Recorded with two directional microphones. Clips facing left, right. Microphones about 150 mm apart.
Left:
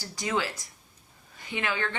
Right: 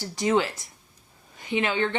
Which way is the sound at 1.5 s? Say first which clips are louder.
Right 6 dB; 20° right (ahead or behind).